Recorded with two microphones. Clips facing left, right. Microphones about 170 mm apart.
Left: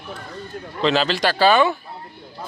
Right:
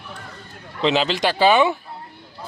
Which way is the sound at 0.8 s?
15° right (ahead or behind).